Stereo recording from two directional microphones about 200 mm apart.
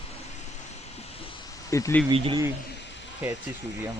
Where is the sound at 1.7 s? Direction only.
15° left (ahead or behind).